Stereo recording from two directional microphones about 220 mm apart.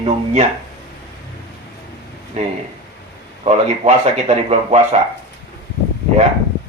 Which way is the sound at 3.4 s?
30° right (ahead or behind).